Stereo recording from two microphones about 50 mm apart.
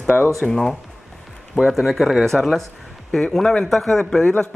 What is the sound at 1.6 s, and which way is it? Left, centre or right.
Speech, centre.